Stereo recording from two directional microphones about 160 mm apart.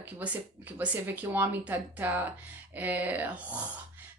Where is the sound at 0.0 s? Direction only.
10° right (ahead or behind).